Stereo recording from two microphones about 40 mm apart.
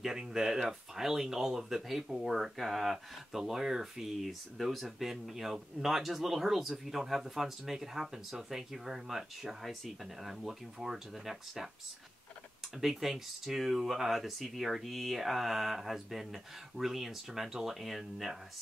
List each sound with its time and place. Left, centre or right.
0.0 s speech: centre
12.8 s speech: centre